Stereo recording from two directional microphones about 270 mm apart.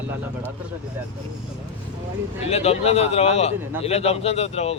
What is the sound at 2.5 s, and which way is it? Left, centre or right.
A man's voice, left.